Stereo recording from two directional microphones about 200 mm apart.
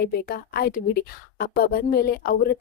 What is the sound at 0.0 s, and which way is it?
Speech, 50° left (ahead or behind).